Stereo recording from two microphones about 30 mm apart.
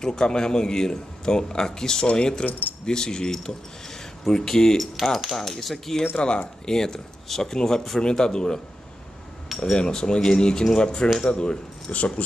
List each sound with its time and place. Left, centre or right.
0.0 s a man's voice: left
5.0 s speech: centre
5.3 s a man's voice: centre
9.6 s a man's voice: left
11.9 s speech: left